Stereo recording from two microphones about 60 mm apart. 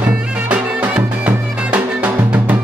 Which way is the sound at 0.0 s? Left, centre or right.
Right.